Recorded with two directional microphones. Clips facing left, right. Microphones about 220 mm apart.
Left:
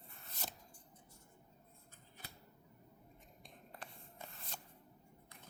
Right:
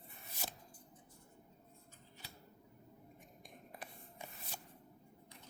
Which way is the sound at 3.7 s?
10° right (ahead or behind).